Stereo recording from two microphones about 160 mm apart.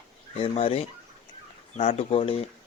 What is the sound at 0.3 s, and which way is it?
Speech, 35° left (ahead or behind).